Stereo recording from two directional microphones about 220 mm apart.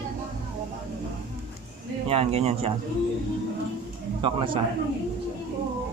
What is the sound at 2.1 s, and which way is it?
Speech, 25° right (ahead or behind).